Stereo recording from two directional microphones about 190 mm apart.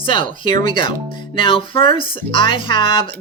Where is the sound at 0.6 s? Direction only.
25° left (ahead or behind).